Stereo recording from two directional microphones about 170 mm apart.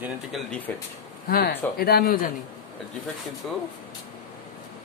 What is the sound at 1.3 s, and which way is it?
Speech, 60° left (ahead or behind).